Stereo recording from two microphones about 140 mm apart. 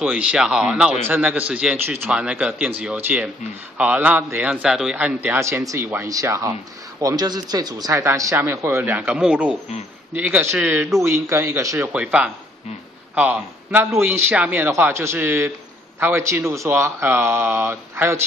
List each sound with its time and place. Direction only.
0.0 s a man's voice: 5° right (ahead or behind)
11.9 s a man's voice: 10° right (ahead or behind)